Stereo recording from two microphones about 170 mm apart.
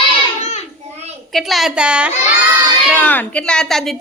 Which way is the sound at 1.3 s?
Centre (ahead or behind).